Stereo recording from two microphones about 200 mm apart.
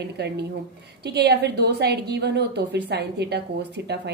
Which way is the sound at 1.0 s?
55° right (ahead or behind).